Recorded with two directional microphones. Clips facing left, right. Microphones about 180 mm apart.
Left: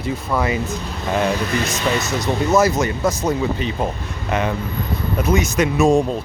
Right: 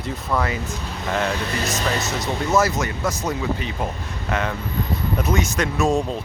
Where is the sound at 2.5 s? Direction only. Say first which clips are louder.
Left 3 dB; 20° left (ahead or behind).